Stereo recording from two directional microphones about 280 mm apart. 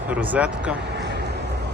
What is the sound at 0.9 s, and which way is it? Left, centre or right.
Vehicle, right.